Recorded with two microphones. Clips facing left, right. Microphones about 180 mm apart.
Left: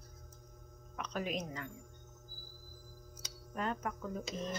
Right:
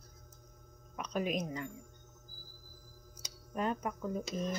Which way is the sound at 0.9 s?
15° right (ahead or behind).